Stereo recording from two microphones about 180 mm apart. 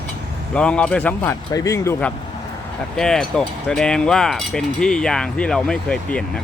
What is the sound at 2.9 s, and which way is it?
Speech, 5° left (ahead or behind).